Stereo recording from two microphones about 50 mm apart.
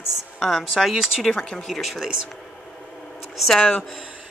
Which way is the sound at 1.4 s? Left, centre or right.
Centre.